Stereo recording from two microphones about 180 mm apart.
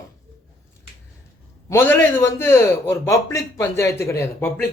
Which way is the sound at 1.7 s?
10° left (ahead or behind).